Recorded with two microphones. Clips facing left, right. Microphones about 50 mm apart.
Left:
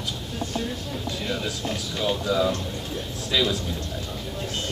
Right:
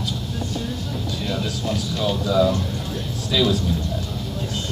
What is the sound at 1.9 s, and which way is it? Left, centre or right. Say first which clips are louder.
Speech: right 2 dB; centre.